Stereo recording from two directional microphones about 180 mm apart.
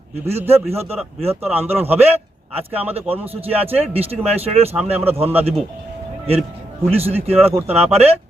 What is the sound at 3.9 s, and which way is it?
Speech, 35° right (ahead or behind).